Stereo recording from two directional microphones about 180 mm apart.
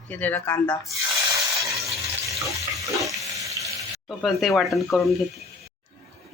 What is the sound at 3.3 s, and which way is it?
Frying, 20° right (ahead or behind).